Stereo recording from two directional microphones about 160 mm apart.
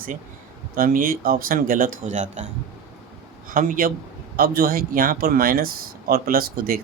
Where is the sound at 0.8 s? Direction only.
65° right (ahead or behind); by 2.5 s 50° right (ahead or behind).